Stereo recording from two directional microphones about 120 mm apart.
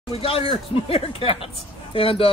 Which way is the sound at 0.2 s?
50° left (ahead or behind).